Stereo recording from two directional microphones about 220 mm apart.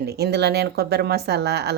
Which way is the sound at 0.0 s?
45° right (ahead or behind).